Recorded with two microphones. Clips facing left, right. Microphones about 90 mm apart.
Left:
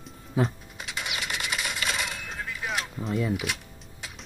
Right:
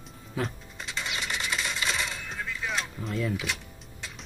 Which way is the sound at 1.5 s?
15° left (ahead or behind).